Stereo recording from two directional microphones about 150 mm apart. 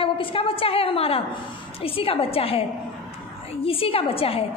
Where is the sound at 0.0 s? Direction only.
35° left (ahead or behind).